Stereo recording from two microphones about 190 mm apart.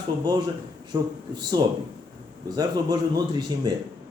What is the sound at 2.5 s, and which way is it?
Speech, 20° right (ahead or behind).